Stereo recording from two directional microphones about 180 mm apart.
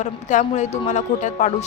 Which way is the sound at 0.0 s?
45° left (ahead or behind).